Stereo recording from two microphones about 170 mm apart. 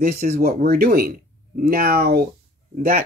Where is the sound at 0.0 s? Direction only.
60° right (ahead or behind).